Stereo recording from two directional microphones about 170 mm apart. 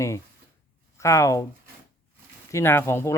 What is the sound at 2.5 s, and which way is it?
Speech, 15° left (ahead or behind).